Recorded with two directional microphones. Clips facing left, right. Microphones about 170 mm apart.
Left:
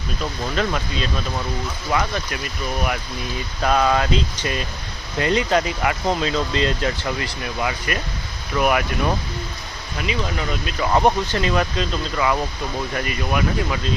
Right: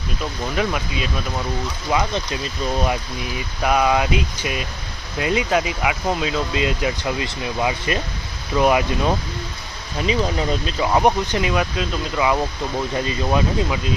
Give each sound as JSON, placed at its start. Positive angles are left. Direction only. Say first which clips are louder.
{"t": 0.5, "sound": "speech", "louder": "right 1 dB", "side_deg": -10}
{"t": 3.3, "sound": "speech", "louder": "even", "side_deg": -10}
{"t": 10.8, "sound": "speech", "louder": "even", "side_deg": -10}